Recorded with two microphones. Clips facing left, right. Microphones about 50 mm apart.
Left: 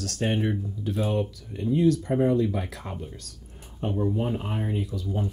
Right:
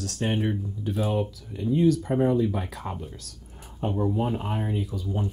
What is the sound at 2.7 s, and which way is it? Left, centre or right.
Speech, centre.